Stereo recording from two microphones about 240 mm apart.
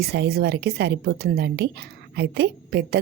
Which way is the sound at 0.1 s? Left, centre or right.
Right.